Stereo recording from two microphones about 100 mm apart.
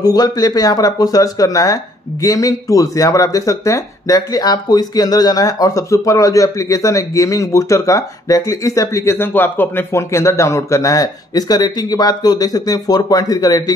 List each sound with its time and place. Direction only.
0.0 s speech: 40° left (ahead or behind)